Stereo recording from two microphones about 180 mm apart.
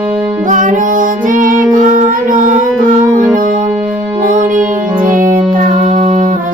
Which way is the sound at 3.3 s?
50° right (ahead or behind).